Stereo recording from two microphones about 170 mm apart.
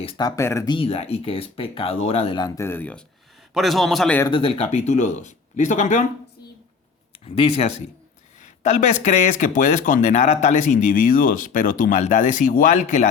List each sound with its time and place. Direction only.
0.0 s speech: 35° left (ahead or behind)
0.3 s speech: 15° left (ahead or behind)
2.6 s speech: 15° left (ahead or behind)
3.5 s a man's voice: centre (ahead or behind)
4.3 s speech: 30° left (ahead or behind)
7.3 s speech: 35° left (ahead or behind)